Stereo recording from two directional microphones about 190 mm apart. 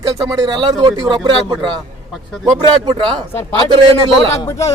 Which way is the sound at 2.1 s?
Centre (ahead or behind).